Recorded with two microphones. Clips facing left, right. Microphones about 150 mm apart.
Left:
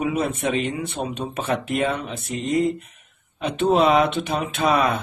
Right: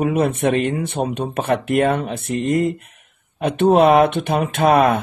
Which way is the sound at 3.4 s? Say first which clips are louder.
Right 5 dB; 50° right (ahead or behind).